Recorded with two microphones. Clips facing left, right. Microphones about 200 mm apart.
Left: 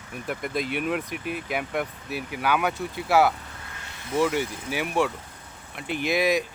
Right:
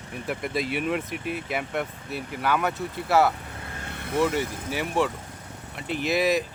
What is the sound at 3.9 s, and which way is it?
Vehicle, 60° right (ahead or behind).